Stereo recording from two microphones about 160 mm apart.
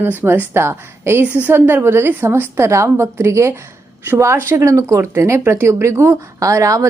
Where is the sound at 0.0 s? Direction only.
15° right (ahead or behind).